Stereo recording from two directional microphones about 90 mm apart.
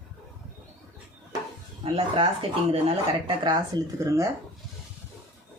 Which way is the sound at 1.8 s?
90° right.